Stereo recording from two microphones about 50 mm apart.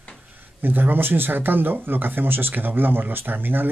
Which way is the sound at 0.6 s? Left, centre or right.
Right.